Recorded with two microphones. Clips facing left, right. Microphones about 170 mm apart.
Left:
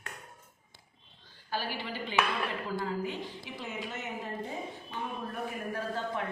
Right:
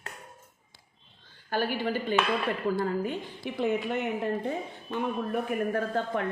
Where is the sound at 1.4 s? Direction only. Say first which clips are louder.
Right 7 dB; 55° right (ahead or behind).